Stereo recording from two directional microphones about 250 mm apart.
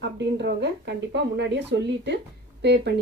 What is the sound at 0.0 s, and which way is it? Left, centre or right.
Speech, right.